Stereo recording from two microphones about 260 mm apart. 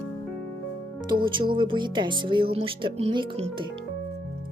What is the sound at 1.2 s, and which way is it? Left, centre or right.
Speech, centre.